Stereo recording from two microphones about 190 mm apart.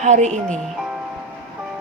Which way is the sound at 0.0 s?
40° right (ahead or behind).